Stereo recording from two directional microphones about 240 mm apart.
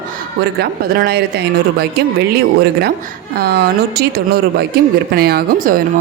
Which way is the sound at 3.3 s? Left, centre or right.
Right.